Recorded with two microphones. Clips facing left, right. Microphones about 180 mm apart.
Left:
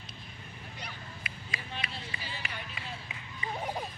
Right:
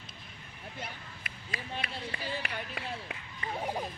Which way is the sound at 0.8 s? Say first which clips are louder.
Right 2 dB; 50° right (ahead or behind).